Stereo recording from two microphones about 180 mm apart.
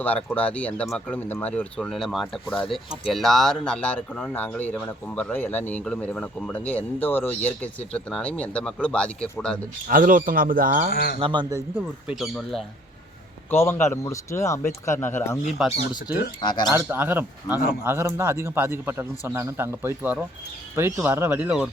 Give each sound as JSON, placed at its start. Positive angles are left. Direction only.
{"t": 0.0, "sound": "speech", "side_deg": 10}
{"t": 9.9, "sound": "speech", "side_deg": -50}
{"t": 10.9, "sound": "speech", "side_deg": 60}
{"t": 11.2, "sound": "a man's voice", "side_deg": -25}
{"t": 12.0, "sound": "speech", "side_deg": 0}
{"t": 13.5, "sound": "speech", "side_deg": 10}
{"t": 15.5, "sound": "speech", "side_deg": -5}
{"t": 16.4, "sound": "speech", "side_deg": 25}
{"t": 16.7, "sound": "speech", "side_deg": -10}